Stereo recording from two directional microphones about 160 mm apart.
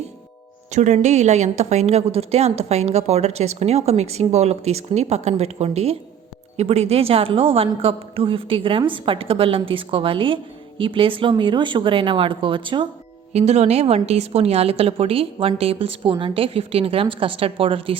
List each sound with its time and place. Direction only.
0.7 s a woman's voice: 50° right (ahead or behind); by 12.9 s 30° right (ahead or behind)
13.3 s a woman's voice: 40° right (ahead or behind)